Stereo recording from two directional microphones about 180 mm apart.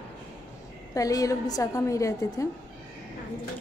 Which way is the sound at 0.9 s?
20° left (ahead or behind).